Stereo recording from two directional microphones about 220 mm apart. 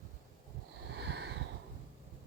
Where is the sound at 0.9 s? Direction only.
50° right (ahead or behind).